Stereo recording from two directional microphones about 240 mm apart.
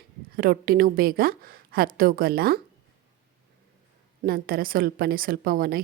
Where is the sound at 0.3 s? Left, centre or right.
Right.